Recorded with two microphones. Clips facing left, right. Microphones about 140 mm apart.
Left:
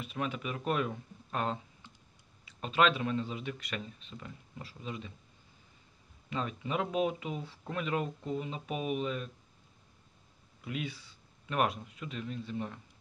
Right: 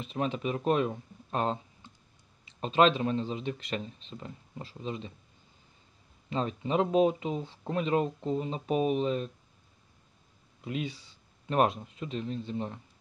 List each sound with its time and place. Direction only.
0.0 s speech: 25° right (ahead or behind)
6.3 s speech: 30° right (ahead or behind)
10.6 s speech: 25° right (ahead or behind)